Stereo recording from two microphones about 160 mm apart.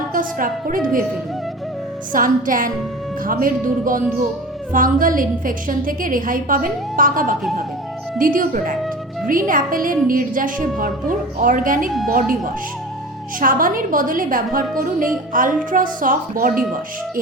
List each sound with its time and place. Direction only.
0.1 s a woman's voice: 60° right (ahead or behind)
2.1 s a woman's voice: 60° right (ahead or behind)
13.4 s a woman's voice: 60° right (ahead or behind)